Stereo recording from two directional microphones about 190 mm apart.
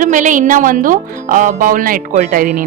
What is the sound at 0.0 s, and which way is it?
Speech, 40° right (ahead or behind).